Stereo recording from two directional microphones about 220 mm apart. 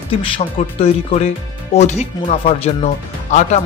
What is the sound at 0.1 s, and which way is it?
Speech, 25° left (ahead or behind).